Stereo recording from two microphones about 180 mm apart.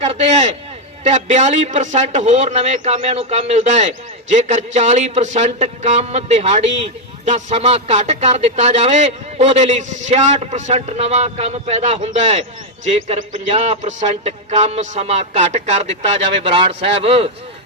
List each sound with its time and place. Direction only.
0.1 s a man's voice: 40° right (ahead or behind)
16.4 s a man's voice: 30° right (ahead or behind)